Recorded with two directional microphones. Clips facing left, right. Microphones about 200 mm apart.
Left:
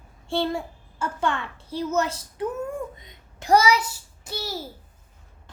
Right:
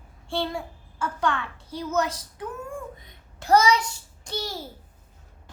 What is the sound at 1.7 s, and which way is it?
Speech, 25° left (ahead or behind).